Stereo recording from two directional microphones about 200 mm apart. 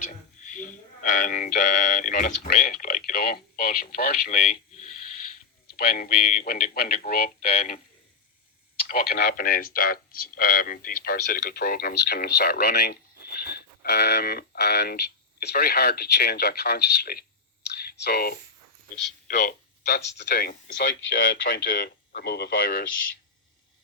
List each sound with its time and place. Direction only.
0.5 s speech: 40° left (ahead or behind)
5.7 s speech: 50° left (ahead or behind)
8.9 s speech: 50° left (ahead or behind)
17.7 s whispering: 50° left (ahead or behind)
19.3 s speech: 55° left (ahead or behind)
21.6 s speech: 60° left (ahead or behind)